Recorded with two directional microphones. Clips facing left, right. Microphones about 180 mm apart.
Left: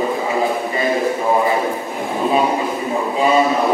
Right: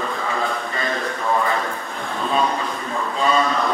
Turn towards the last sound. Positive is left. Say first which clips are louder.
# left 5 dB
turn(degrees=15)  # may be behind; listen again after turning